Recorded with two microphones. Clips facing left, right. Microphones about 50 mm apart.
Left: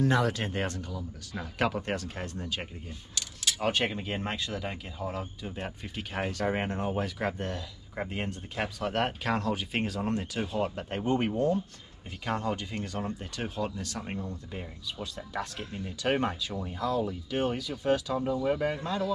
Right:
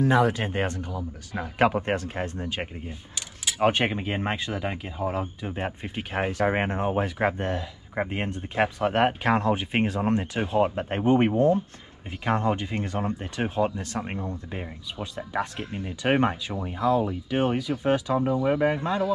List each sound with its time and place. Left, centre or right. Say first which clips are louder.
0.0 s speech: right 5 dB; centre